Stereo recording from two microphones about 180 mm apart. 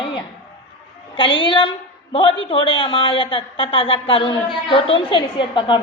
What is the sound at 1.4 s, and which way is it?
A woman's voice, 25° left (ahead or behind).